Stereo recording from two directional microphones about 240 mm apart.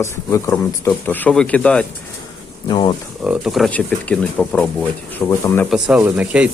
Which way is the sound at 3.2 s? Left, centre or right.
Centre.